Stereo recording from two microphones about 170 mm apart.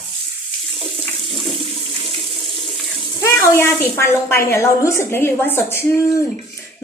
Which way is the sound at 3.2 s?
15° left (ahead or behind).